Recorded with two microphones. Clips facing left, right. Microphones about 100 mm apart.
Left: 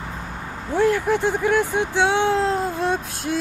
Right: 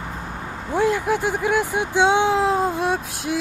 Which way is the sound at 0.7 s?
15° right (ahead or behind).